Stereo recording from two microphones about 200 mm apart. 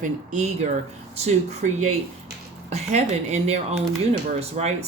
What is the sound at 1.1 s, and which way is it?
Speech, 35° right (ahead or behind).